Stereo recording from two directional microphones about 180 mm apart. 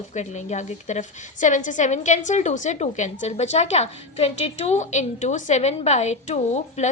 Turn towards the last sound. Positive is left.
turn(degrees=40)  # may be behind; listen again after turning